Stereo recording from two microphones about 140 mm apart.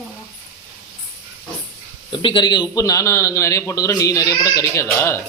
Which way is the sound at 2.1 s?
35° left (ahead or behind).